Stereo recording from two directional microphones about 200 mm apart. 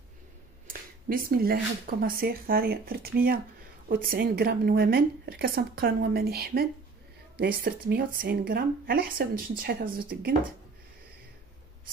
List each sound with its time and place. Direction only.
0.7 s a woman's voice: 45° right (ahead or behind)